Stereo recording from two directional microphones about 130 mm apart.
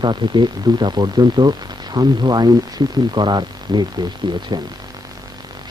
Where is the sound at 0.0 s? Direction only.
35° right (ahead or behind).